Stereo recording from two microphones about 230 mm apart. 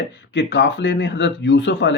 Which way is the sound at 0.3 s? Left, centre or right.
Left.